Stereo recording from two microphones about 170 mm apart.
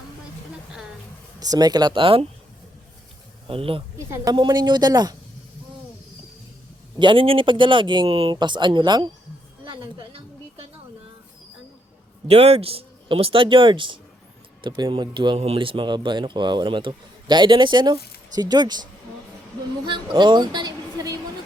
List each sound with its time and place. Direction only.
1.4 s speech: 20° right (ahead or behind)
3.4 s speech: 35° right (ahead or behind)
3.9 s a woman's voice: 15° right (ahead or behind)
7.0 s speech: 30° right (ahead or behind)
10.0 s a sound: 35° right (ahead or behind)
12.3 s speech: 35° right (ahead or behind)